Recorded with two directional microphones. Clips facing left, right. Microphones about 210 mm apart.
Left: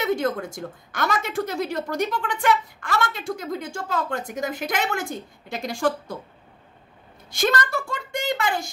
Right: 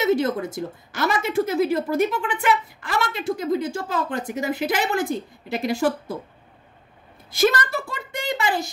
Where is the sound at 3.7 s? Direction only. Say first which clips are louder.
Right 1 dB; 5° right (ahead or behind).